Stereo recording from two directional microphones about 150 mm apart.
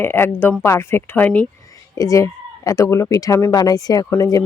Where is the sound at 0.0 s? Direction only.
15° left (ahead or behind).